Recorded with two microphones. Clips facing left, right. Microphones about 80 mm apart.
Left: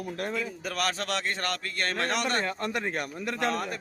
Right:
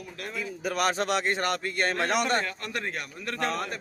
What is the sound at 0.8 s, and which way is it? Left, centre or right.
A man's voice, centre.